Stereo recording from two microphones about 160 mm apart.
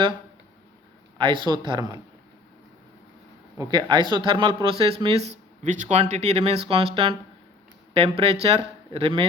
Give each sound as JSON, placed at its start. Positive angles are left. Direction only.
{"t": 1.2, "sound": "speech", "side_deg": -30}
{"t": 3.6, "sound": "a man's voice", "side_deg": -30}